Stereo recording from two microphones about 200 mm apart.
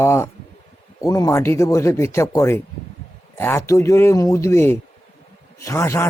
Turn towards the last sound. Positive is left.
turn(degrees=15)  # may be behind; listen again after turning